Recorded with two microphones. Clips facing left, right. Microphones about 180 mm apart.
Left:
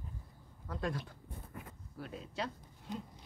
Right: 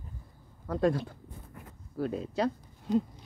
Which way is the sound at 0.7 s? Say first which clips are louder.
Right 11 dB; 35° right (ahead or behind).